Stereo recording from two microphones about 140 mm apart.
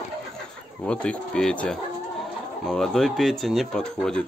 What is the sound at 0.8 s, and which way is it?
Speech, 10° left (ahead or behind).